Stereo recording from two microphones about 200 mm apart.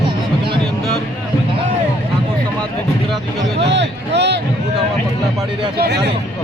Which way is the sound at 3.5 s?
60° right (ahead or behind).